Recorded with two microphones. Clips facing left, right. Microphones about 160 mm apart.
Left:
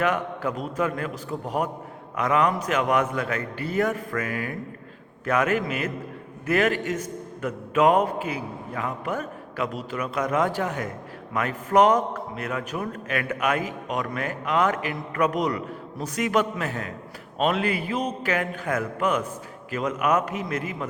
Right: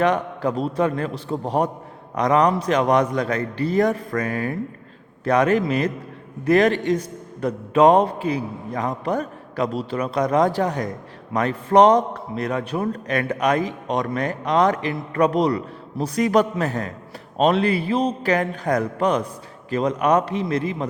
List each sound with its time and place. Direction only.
0.0 s a man's voice: 35° right (ahead or behind)